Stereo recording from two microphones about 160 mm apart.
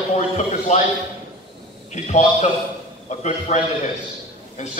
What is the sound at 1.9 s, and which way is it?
Speech, 45° left (ahead or behind).